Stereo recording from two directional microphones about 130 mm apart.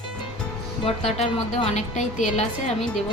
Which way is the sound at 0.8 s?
50° left (ahead or behind).